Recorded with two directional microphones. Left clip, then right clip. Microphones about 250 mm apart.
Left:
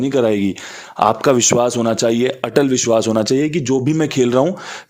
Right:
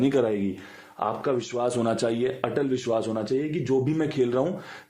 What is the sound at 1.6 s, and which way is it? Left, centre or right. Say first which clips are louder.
A man's voice: left 9 dB; left.